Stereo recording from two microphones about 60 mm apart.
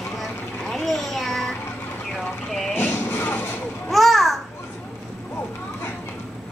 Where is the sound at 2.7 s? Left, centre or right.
Left.